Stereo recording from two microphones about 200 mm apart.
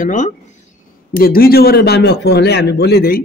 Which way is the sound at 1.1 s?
45° left (ahead or behind).